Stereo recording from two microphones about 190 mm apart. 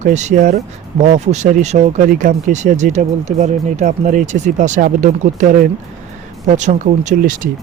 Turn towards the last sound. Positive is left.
turn(degrees=-40)  # may be behind; listen again after turning